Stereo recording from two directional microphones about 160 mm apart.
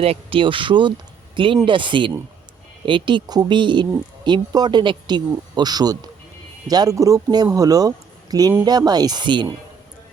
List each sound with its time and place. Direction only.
0.0 s speech: 35° right (ahead or behind)